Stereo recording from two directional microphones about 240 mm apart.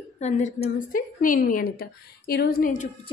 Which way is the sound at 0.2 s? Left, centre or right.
Left.